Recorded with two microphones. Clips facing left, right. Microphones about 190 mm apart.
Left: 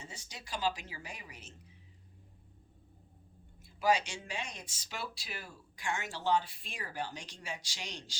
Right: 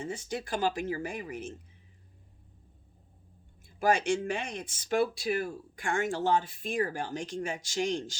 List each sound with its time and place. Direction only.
0.0 s speech: 55° right (ahead or behind)
3.6 s speech: 50° right (ahead or behind)